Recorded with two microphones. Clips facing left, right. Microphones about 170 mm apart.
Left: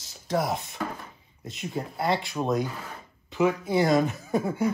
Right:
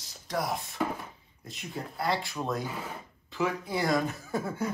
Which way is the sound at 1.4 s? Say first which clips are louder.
Left 6 dB; 20° left (ahead or behind).